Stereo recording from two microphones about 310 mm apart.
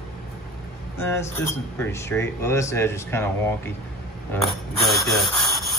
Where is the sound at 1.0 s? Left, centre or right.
Centre.